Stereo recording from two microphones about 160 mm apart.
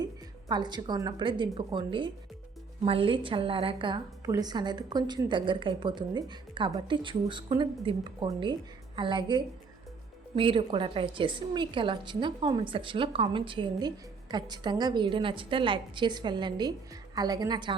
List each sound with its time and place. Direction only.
0.0 s a woman's voice: 25° right (ahead or behind)